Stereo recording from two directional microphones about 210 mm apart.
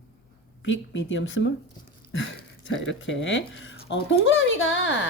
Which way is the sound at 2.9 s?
65° left (ahead or behind).